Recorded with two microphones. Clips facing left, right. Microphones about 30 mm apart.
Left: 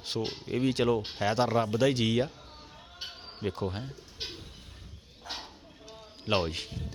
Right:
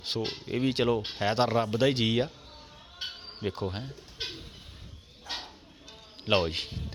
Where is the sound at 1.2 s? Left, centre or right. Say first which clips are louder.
Right 2 dB; right.